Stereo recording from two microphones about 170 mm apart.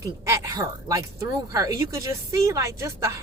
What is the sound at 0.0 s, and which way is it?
A woman's voice, 20° right (ahead or behind).